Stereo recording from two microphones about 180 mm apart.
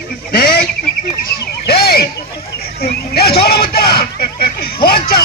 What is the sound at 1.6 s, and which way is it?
Speech, 60° left (ahead or behind).